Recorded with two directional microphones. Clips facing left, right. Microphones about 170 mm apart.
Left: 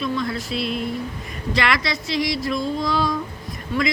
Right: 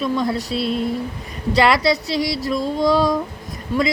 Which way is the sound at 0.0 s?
35° right (ahead or behind).